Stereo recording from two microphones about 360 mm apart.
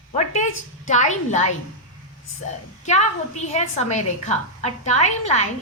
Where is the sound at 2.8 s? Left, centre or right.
Centre.